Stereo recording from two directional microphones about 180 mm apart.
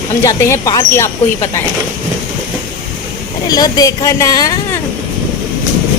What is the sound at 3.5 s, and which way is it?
Speech, 20° left (ahead or behind).